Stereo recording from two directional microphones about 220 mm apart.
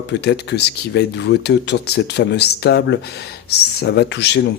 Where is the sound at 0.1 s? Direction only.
50° left (ahead or behind).